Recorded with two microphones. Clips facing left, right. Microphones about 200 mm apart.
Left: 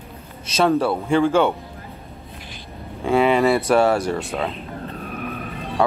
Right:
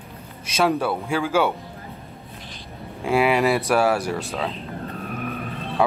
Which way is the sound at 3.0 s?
5° right (ahead or behind).